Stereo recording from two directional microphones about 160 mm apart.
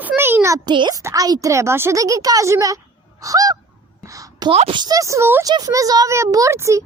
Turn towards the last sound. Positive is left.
turn(degrees=-20)  # may be behind; listen again after turning